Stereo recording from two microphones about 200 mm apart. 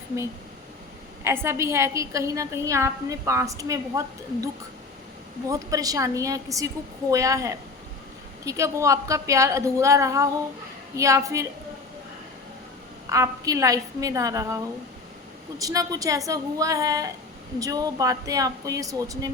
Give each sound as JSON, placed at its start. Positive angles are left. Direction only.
{"t": 1.2, "sound": "a woman's voice", "side_deg": -10}
{"t": 5.5, "sound": "a woman's voice", "side_deg": -15}
{"t": 13.1, "sound": "a woman's voice", "side_deg": -15}